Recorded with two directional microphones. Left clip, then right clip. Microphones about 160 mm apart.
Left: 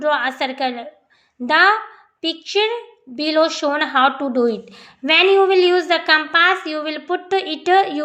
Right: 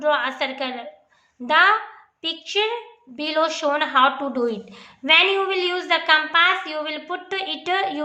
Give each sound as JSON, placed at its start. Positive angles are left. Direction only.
{"t": 0.0, "sound": "a woman's voice", "side_deg": 25}